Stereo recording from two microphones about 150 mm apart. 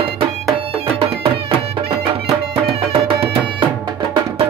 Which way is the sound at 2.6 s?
40° right (ahead or behind).